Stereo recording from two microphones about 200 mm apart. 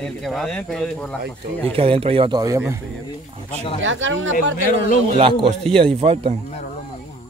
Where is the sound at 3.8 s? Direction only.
70° right (ahead or behind).